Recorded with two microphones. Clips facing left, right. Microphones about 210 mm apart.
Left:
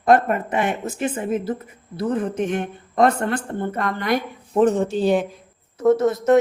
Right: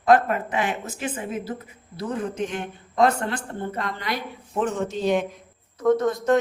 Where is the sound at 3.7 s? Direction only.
50° left (ahead or behind).